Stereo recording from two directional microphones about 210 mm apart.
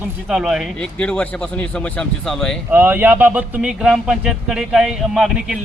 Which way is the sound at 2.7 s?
10° right (ahead or behind).